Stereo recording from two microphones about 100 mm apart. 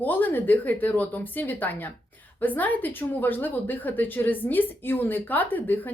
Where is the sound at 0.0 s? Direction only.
20° left (ahead or behind).